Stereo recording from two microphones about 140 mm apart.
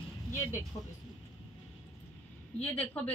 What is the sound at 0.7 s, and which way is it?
Speech, 30° left (ahead or behind).